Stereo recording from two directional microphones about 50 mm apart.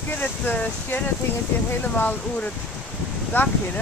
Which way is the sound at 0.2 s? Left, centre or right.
Left.